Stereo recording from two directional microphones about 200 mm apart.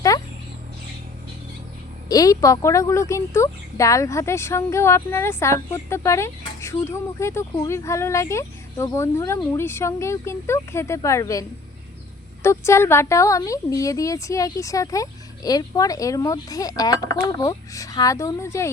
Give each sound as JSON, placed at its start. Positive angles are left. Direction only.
{"t": 2.0, "sound": "speech", "side_deg": 20}